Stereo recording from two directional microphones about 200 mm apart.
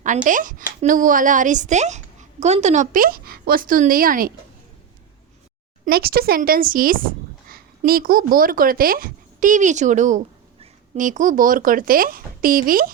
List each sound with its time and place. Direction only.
0.3 s speech: 40° right (ahead or behind)
5.8 s speech: 50° right (ahead or behind)